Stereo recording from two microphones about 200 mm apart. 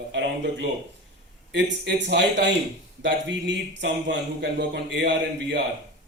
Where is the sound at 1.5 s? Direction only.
60° right (ahead or behind).